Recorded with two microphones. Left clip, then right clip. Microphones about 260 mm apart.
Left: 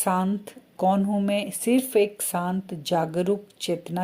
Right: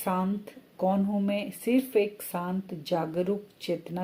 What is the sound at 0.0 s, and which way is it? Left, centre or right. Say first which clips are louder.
Speech: left 5 dB; left.